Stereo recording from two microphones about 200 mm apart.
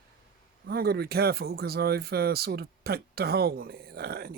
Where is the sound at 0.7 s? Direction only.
50° right (ahead or behind).